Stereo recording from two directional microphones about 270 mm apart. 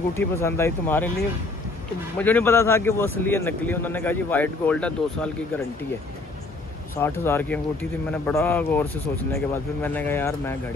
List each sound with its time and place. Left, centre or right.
0.1 s speech: centre
2.1 s speech: centre
7.0 s speech: centre